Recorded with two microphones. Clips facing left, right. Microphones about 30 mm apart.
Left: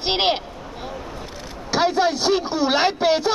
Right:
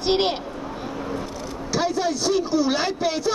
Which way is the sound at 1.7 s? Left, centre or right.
Left.